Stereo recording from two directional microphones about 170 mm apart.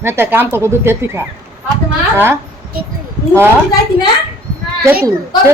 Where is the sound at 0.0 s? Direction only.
15° right (ahead or behind).